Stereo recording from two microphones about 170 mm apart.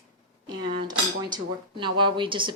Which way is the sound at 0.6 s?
25° right (ahead or behind).